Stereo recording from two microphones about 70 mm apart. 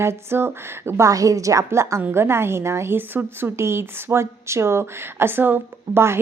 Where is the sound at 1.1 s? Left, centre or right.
Right.